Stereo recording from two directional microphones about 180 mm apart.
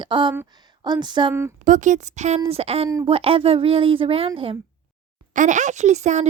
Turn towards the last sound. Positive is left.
turn(degrees=-40)  # may be behind; listen again after turning